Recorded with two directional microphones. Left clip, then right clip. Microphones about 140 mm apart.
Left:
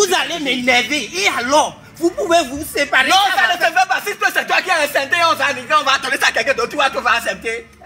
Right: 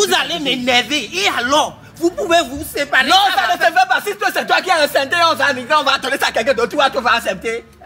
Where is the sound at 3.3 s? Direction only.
55° right (ahead or behind).